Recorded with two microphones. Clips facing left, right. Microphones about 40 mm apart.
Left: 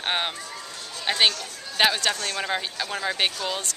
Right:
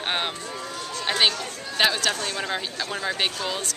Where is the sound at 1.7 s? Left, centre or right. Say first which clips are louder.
Even; centre.